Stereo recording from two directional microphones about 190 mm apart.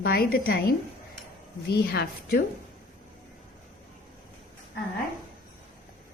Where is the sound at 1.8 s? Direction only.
55° left (ahead or behind).